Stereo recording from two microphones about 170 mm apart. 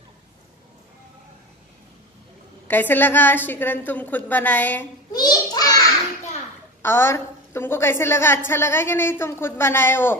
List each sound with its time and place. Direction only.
2.7 s a woman's voice: 10° left (ahead or behind)
5.1 s a sound: 25° left (ahead or behind)
6.8 s a woman's voice: 15° left (ahead or behind)